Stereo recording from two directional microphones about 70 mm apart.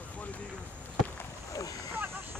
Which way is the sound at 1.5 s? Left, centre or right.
Left.